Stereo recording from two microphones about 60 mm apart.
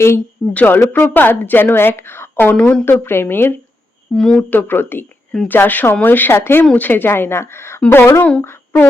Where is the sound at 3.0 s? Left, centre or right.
Left.